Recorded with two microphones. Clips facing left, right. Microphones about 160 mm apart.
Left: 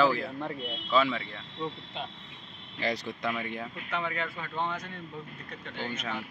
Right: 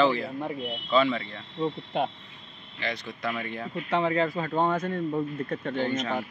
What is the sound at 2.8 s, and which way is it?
Speech, 40° left (ahead or behind).